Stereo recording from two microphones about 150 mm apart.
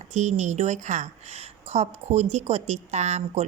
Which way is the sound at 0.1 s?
50° right (ahead or behind).